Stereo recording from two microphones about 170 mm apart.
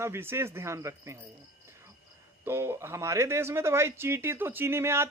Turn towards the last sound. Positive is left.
turn(degrees=-15)  # may be behind; listen again after turning